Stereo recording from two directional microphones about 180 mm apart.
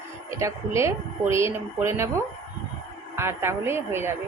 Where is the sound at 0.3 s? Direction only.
15° right (ahead or behind).